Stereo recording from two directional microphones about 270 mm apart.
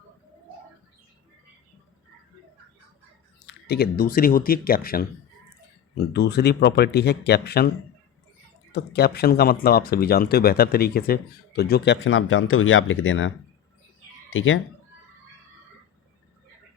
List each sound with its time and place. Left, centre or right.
3.4 s speech: left
6.1 s speech: left
8.7 s speech: left